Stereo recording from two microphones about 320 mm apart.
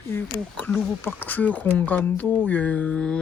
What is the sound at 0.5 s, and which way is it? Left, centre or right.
A woman's voice, centre.